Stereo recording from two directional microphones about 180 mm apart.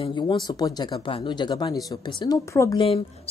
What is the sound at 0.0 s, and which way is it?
Speech, 25° left (ahead or behind).